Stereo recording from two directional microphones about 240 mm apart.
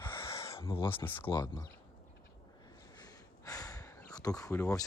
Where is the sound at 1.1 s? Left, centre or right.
Centre.